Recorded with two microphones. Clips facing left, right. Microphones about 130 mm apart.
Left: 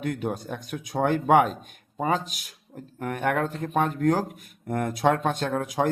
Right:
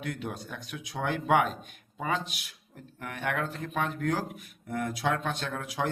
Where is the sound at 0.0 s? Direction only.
45° left (ahead or behind).